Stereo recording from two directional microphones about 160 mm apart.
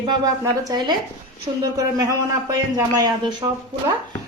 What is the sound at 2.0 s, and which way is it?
A man's voice, 25° right (ahead or behind).